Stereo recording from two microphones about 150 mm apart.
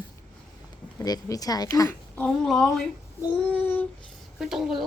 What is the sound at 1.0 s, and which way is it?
A woman's voice, 25° left (ahead or behind).